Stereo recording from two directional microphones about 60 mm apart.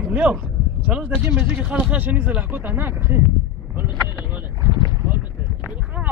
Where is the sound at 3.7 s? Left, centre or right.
Right.